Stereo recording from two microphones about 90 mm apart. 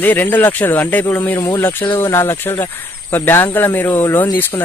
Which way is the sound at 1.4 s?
40° left (ahead or behind).